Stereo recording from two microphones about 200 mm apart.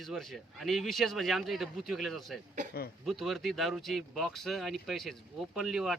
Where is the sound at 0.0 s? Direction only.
Centre (ahead or behind).